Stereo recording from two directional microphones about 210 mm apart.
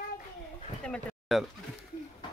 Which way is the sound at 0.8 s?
5° left (ahead or behind).